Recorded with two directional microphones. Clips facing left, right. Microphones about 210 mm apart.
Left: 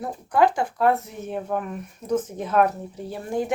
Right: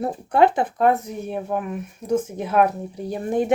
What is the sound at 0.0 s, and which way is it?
Speech, 25° right (ahead or behind).